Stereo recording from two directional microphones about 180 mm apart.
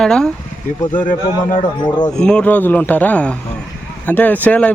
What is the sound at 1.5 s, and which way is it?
Speech, 25° left (ahead or behind).